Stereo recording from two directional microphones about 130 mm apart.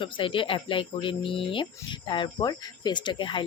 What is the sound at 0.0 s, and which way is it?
Speech, 40° left (ahead or behind).